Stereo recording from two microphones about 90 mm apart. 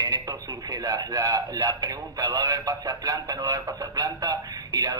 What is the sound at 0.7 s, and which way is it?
A man's voice, 45° right (ahead or behind).